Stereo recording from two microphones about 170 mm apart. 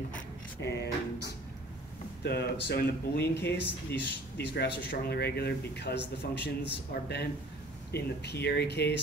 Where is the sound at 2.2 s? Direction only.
70° left (ahead or behind); by 4.7 s 90° left.